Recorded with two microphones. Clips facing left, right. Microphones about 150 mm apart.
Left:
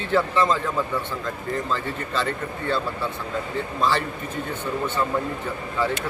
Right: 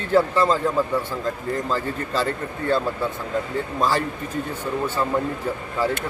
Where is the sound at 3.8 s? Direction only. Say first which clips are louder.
Right 1 dB; 40° right (ahead or behind).